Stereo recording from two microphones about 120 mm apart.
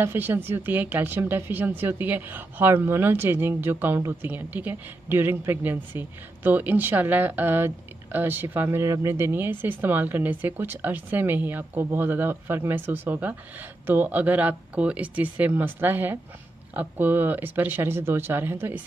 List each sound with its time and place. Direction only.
0.0 s a woman's voice: 20° right (ahead or behind)